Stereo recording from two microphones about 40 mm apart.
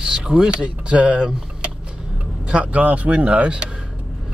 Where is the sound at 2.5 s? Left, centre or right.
Right.